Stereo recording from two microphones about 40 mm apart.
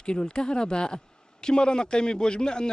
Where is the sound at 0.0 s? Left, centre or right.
Left.